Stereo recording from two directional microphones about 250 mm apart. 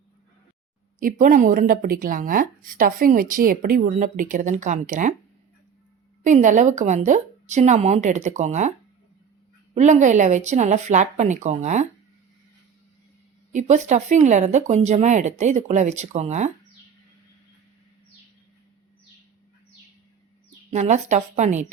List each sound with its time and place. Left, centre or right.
0.9 s speech: right
6.2 s speech: right
9.7 s speech: right
13.5 s speech: right
20.7 s speech: right